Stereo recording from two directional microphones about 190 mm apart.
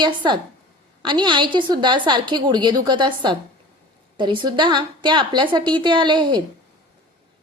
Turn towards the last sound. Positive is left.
turn(degrees=-25)  # may be behind; listen again after turning